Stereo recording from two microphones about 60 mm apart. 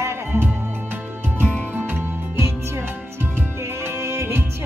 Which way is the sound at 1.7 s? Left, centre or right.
Right.